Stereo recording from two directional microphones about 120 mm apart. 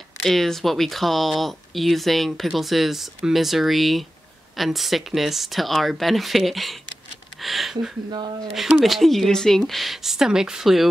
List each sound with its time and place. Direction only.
0.2 s speech: centre (ahead or behind)
8.1 s speech: 40° right (ahead or behind)
8.5 s speech: 5° right (ahead or behind)